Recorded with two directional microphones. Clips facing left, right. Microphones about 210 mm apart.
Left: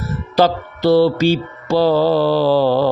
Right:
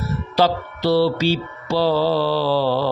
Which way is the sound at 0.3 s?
50° left (ahead or behind).